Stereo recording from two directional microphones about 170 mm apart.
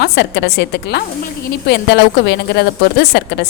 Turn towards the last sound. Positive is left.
turn(degrees=90)